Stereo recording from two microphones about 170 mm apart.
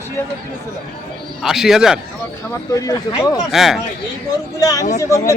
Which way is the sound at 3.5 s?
Centre (ahead or behind).